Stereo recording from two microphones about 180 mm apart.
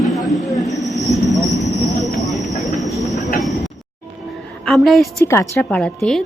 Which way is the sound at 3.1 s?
40° left (ahead or behind).